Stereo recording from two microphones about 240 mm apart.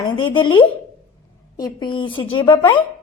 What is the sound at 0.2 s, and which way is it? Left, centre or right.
A woman's voice, left.